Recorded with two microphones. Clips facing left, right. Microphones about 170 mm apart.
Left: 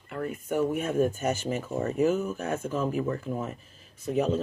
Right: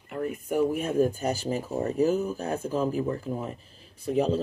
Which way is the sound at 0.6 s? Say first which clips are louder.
Right 2 dB; 35° right (ahead or behind).